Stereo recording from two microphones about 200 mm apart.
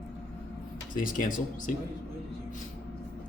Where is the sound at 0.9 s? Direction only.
45° left (ahead or behind).